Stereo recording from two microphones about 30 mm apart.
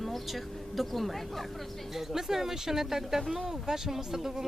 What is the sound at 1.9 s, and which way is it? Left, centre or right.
Speech, centre.